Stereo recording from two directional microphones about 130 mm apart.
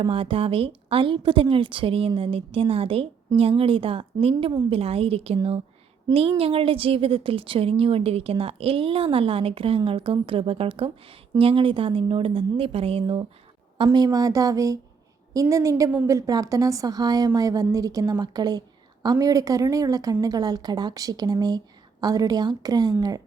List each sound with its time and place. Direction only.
0.0 s a woman's voice: 45° right (ahead or behind)
13.8 s a woman's voice: 30° right (ahead or behind)